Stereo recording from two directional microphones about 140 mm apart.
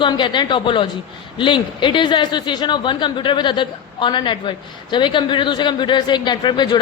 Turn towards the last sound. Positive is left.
turn(degrees=30)  # may be behind; listen again after turning